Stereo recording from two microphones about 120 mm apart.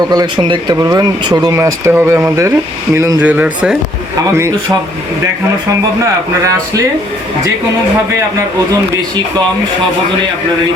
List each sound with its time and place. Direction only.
0.1 s speech: 35° right (ahead or behind)
3.2 s speech: 10° right (ahead or behind)